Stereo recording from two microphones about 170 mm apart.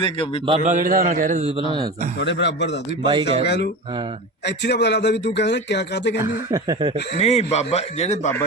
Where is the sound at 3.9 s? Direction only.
30° right (ahead or behind).